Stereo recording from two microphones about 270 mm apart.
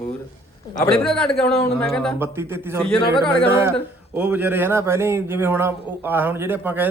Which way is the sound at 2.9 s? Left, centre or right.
Centre.